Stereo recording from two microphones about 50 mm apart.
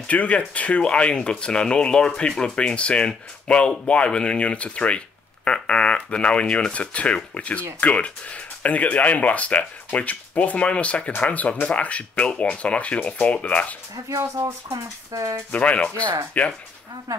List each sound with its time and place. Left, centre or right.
0.1 s speech: left
14.0 s speech: right
15.5 s speech: left